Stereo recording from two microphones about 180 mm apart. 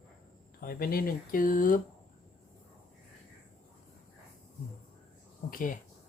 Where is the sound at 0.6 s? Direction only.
55° left (ahead or behind).